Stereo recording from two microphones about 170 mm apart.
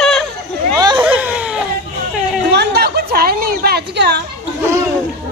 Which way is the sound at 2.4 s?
75° right (ahead or behind).